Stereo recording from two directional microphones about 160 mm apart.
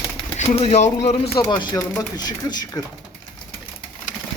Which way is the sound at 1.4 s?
25° left (ahead or behind).